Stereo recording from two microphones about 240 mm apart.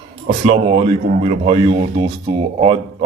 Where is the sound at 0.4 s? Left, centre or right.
Right.